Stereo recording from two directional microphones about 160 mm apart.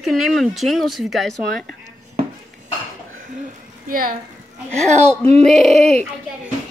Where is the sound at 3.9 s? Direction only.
60° right (ahead or behind).